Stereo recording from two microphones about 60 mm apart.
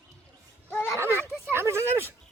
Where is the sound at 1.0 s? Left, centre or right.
Right.